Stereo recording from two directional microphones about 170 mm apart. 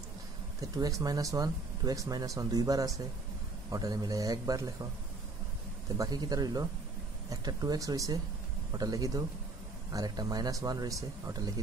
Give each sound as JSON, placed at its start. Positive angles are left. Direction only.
{"t": 0.6, "sound": "speech", "side_deg": -20}
{"t": 5.9, "sound": "speech", "side_deg": -25}